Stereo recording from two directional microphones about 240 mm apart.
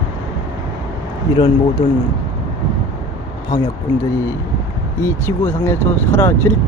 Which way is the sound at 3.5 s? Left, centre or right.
Centre.